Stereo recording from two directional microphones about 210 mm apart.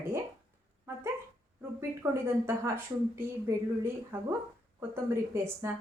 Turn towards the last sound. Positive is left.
turn(degrees=-10)  # may be behind; listen again after turning